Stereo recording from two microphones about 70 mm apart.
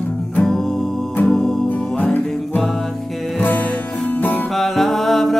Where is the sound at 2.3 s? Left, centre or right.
Centre.